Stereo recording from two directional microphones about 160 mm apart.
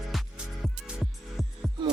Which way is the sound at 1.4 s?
Centre (ahead or behind).